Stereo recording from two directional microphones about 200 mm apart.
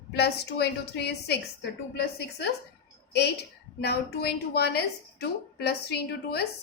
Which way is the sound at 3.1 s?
55° left (ahead or behind).